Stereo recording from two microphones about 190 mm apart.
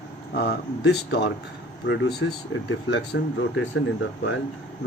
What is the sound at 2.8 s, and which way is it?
Speech, 70° left (ahead or behind).